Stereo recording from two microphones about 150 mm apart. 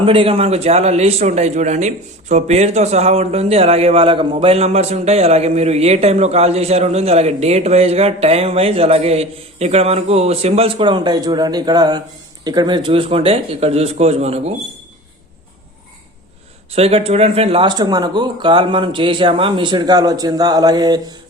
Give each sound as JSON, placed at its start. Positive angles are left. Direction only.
{"t": 0.0, "sound": "a man's voice", "side_deg": -35}
{"t": 16.7, "sound": "speech", "side_deg": -40}